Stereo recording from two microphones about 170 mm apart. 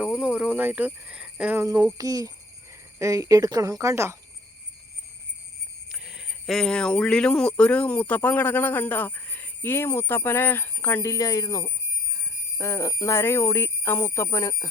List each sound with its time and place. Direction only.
0.0 s cricket: centre (ahead or behind)
0.3 s speech: 10° right (ahead or behind)
1.6 s speech: 20° right (ahead or behind)
5.9 s speech: 5° right (ahead or behind); by 14.7 s 20° left (ahead or behind)